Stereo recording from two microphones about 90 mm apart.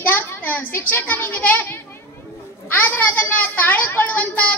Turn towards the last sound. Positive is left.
turn(degrees=20)  # may be behind; listen again after turning